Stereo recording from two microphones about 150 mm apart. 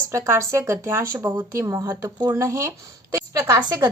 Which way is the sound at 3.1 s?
25° right (ahead or behind).